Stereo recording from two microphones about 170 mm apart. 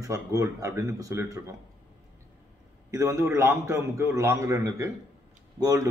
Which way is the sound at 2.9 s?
15° right (ahead or behind).